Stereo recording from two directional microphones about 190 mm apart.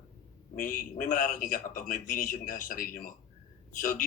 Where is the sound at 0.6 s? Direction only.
45° left (ahead or behind).